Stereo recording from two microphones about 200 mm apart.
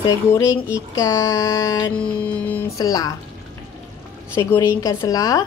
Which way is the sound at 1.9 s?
5° left (ahead or behind).